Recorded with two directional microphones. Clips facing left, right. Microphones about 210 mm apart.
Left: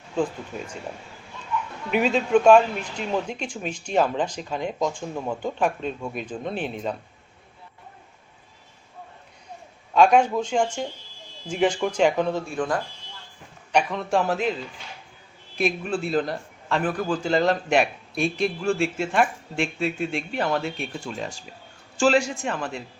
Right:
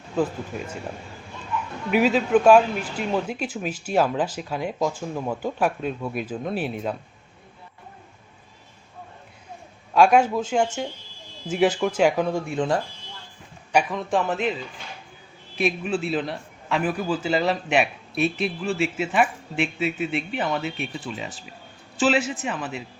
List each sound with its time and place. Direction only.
1.9 s a man's voice: 5° right (ahead or behind)
9.9 s speech: 5° right (ahead or behind)
12.5 s speech: 25° right (ahead or behind)
13.7 s a man's voice: centre (ahead or behind)
15.5 s a man's voice: 5° right (ahead or behind)